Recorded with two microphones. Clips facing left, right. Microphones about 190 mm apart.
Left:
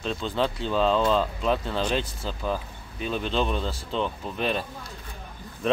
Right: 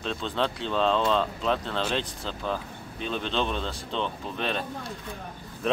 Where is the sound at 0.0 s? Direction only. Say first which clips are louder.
Left 2 dB; 5° left (ahead or behind).